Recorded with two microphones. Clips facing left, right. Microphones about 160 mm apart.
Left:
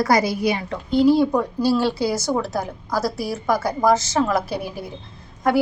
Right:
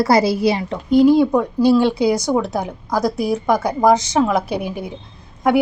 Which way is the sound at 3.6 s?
15° right (ahead or behind).